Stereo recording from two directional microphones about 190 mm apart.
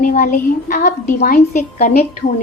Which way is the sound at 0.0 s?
45° left (ahead or behind).